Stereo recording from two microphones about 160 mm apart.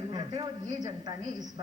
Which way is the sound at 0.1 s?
25° right (ahead or behind).